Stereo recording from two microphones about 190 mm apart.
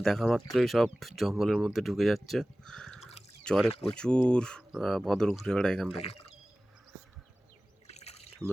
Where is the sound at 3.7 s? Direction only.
30° left (ahead or behind).